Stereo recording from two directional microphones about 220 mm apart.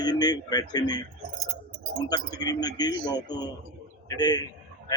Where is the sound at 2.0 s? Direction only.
20° left (ahead or behind).